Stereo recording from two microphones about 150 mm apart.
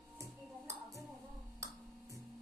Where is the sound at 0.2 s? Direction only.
20° right (ahead or behind).